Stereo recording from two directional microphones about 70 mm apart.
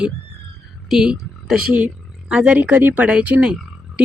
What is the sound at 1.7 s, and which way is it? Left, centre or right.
Speech, centre.